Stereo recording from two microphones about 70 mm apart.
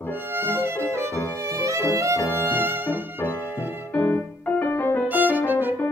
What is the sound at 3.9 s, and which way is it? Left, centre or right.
Music, left.